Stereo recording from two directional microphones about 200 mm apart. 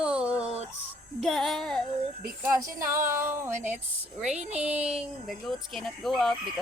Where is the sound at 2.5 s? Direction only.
15° right (ahead or behind).